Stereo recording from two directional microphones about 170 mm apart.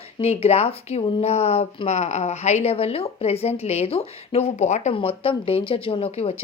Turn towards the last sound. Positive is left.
turn(degrees=35)  # may be behind; listen again after turning